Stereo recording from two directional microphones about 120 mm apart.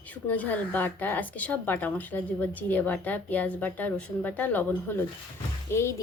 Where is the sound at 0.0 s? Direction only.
10° left (ahead or behind).